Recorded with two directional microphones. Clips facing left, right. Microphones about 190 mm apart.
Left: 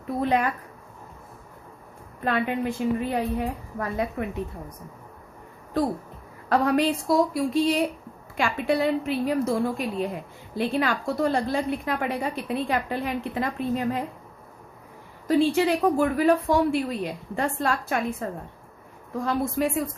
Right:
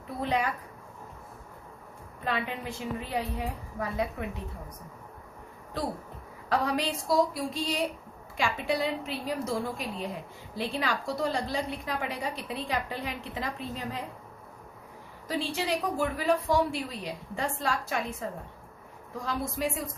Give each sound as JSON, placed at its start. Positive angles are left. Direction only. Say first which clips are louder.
{"t": 0.2, "sound": "a woman's voice", "louder": "left 5 dB", "side_deg": 55}
{"t": 2.2, "sound": "a woman's voice", "louder": "left 7 dB", "side_deg": 55}
{"t": 6.5, "sound": "a woman's voice", "louder": "left 7 dB", "side_deg": 55}
{"t": 15.3, "sound": "a woman's voice", "louder": "left 10 dB", "side_deg": 55}